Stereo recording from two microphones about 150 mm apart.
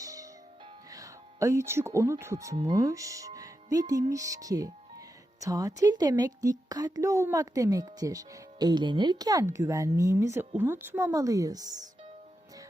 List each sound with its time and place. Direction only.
0.0 s music: 20° right (ahead or behind)
0.9 s speech: 20° right (ahead or behind)